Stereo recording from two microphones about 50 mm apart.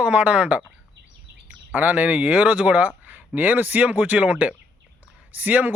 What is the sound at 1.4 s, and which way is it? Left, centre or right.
Speech, right.